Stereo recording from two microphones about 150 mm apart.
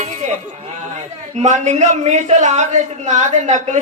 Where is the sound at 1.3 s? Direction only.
50° right (ahead or behind).